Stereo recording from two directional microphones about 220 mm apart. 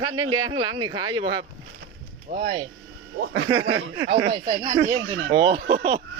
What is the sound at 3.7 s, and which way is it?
Speech, 20° right (ahead or behind).